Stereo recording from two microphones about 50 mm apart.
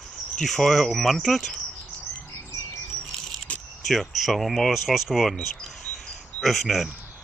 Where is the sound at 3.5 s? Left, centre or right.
Left.